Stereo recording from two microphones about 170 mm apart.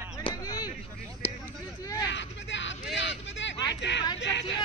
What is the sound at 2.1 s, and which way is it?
Vehicle, 90° left.